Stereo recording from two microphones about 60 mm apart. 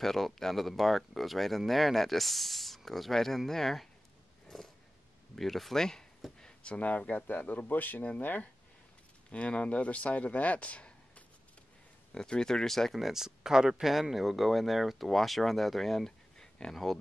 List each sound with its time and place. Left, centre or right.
0.0 s speech: centre
5.3 s speech: centre; by 8.5 s left
9.3 s speech: left; by 16.4 s centre